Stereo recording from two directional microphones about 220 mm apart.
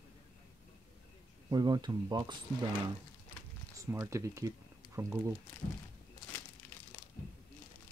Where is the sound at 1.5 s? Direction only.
20° right (ahead or behind).